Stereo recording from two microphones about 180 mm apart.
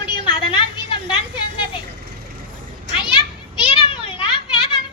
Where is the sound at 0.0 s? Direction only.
25° left (ahead or behind).